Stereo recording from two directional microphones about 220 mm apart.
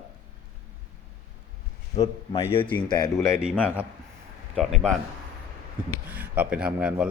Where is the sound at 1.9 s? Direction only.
25° left (ahead or behind).